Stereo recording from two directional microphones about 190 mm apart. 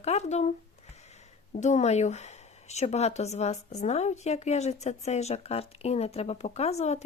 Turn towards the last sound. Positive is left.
turn(degrees=35)  # may be behind; listen again after turning